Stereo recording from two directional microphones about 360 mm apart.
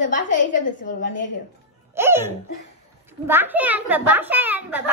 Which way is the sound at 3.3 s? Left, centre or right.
Centre.